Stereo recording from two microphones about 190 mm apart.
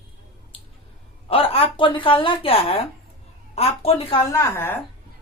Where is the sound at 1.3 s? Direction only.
30° left (ahead or behind).